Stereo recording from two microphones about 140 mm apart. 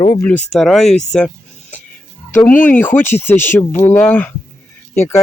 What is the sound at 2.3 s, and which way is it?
Speech, 15° left (ahead or behind).